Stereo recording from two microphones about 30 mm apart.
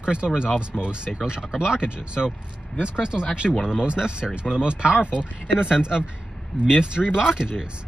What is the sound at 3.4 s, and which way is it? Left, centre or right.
Speech, left.